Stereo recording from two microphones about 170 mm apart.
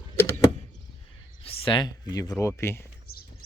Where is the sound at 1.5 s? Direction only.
30° left (ahead or behind); by 2.8 s 15° left (ahead or behind).